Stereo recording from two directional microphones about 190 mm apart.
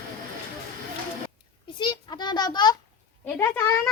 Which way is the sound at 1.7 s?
25° left (ahead or behind).